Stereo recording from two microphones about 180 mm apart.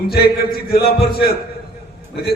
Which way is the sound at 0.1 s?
60° left (ahead or behind).